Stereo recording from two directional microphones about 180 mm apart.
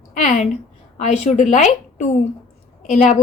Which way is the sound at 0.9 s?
40° left (ahead or behind).